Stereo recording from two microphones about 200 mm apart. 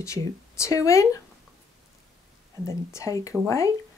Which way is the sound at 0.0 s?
15° left (ahead or behind).